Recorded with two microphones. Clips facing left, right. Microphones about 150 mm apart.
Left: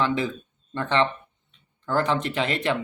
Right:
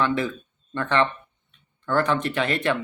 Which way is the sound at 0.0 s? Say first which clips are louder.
Right 1 dB; 20° left (ahead or behind).